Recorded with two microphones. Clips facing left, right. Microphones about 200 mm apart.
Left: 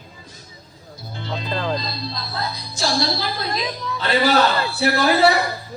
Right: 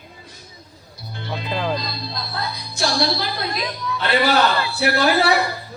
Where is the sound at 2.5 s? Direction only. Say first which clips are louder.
Even; 60° right (ahead or behind).